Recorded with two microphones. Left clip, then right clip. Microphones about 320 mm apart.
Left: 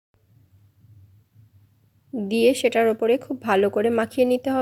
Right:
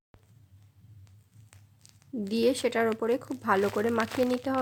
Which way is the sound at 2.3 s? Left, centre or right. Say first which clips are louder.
Left 8 dB; centre.